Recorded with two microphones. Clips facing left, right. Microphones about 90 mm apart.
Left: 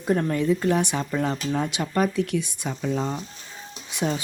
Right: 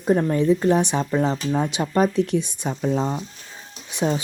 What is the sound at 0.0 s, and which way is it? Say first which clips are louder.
Speech: right 4 dB; 20° right (ahead or behind).